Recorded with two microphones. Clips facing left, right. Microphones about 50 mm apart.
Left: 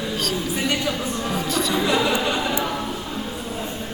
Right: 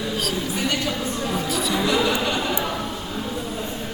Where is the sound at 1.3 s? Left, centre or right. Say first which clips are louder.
Left 2 dB; centre.